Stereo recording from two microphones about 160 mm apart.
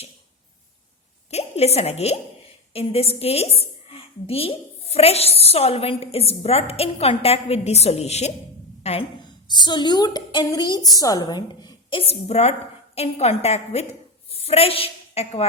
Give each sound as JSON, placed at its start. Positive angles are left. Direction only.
{"t": 1.3, "sound": "a woman's voice", "side_deg": 40}
{"t": 9.5, "sound": "a woman's voice", "side_deg": 25}